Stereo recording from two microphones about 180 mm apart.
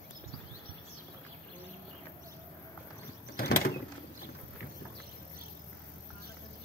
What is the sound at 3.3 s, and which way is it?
Mechanisms, 60° left (ahead or behind).